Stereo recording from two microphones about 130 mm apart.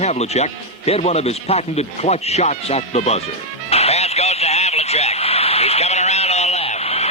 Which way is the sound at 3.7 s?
55° left (ahead or behind).